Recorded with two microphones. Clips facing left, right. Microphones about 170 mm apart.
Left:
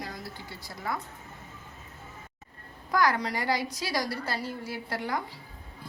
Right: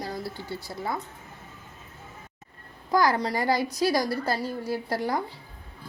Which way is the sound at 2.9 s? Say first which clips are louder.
Right 3 dB; 30° right (ahead or behind).